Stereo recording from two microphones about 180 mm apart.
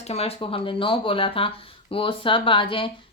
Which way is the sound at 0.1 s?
35° left (ahead or behind).